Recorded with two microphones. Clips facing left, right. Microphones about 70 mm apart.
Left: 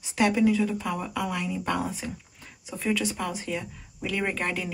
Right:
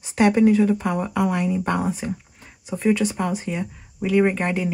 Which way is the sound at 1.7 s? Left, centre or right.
Centre.